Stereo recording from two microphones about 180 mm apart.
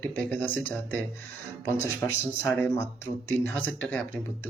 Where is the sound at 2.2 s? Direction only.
15° left (ahead or behind).